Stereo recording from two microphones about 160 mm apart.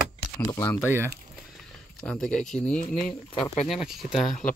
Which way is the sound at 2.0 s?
5° left (ahead or behind).